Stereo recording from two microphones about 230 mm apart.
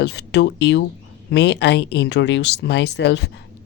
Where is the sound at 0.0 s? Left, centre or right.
Left.